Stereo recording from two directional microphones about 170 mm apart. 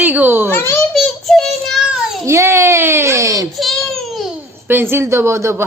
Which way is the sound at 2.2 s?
15° right (ahead or behind).